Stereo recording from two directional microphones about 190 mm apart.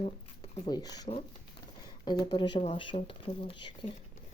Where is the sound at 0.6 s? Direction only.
20° left (ahead or behind).